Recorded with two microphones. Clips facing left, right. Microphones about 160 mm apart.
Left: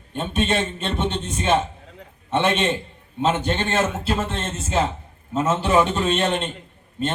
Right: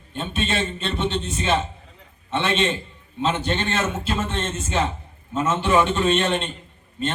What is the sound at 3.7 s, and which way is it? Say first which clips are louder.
Speech: left 2 dB; 40° left (ahead or behind).